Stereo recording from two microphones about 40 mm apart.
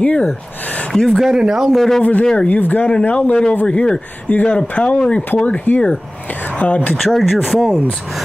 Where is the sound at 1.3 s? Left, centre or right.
Centre.